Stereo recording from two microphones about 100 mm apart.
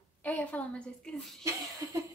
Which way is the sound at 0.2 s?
15° left (ahead or behind).